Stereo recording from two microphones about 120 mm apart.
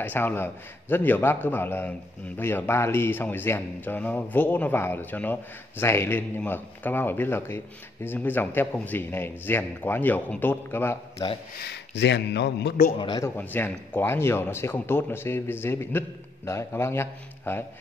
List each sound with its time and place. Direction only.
0.0 s speech: 15° left (ahead or behind)
12.9 s a man's voice: 45° left (ahead or behind)
13.4 s a man's voice: 15° left (ahead or behind)